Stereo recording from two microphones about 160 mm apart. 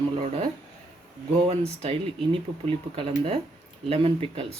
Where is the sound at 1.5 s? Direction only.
40° right (ahead or behind).